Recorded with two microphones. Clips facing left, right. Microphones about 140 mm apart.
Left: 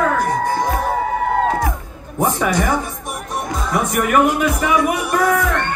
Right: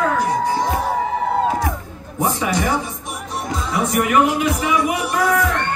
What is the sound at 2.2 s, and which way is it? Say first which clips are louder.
Speech: left 2 dB; 50° left (ahead or behind).